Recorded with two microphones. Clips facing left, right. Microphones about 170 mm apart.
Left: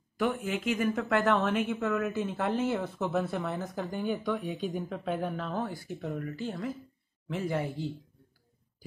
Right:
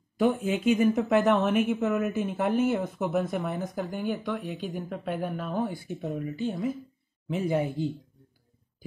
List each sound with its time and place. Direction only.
0.2 s a woman's voice: 25° right (ahead or behind)
3.8 s a woman's voice: 5° right (ahead or behind); by 7.9 s 20° right (ahead or behind)